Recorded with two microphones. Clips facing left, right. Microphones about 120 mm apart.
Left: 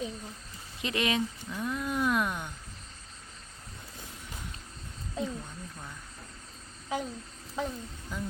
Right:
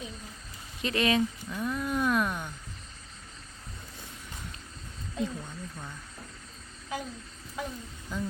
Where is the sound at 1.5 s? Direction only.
15° left (ahead or behind).